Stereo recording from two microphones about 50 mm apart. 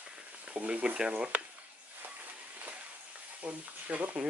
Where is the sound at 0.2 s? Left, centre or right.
Right.